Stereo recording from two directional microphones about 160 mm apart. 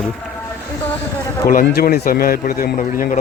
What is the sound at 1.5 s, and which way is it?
Speech, 65° left (ahead or behind).